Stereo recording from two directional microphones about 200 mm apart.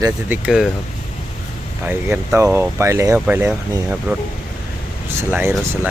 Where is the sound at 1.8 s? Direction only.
10° right (ahead or behind).